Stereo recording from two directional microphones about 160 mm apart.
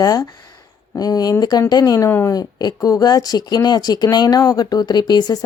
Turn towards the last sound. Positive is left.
turn(degrees=25)  # may be behind; listen again after turning